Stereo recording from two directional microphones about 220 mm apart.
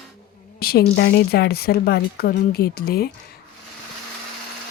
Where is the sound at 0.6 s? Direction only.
45° left (ahead or behind).